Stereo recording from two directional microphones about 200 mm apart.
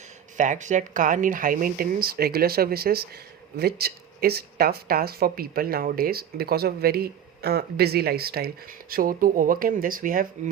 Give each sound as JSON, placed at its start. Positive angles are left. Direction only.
{"t": 0.3, "sound": "speech", "side_deg": -40}